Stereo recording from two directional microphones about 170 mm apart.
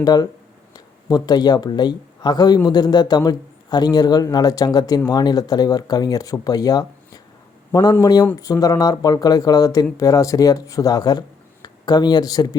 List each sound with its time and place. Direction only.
0.0 s speech: 25° left (ahead or behind)